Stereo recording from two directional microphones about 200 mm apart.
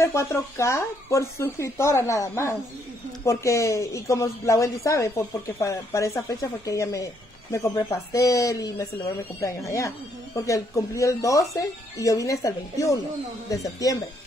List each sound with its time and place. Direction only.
0.0 s speech: 15° left (ahead or behind)